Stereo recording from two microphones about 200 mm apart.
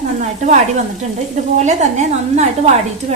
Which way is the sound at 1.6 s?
35° right (ahead or behind).